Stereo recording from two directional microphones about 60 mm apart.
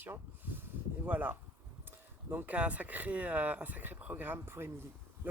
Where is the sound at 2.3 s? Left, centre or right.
Right.